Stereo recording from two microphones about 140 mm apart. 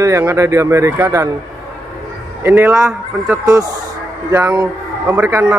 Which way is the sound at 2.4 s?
15° right (ahead or behind).